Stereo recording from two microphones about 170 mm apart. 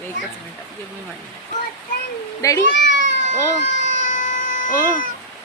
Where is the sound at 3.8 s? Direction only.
90° left.